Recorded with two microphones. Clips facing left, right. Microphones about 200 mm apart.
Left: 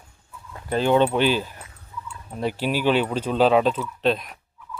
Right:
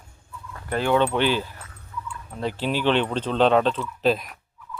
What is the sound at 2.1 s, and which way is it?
Turkey, 25° left (ahead or behind).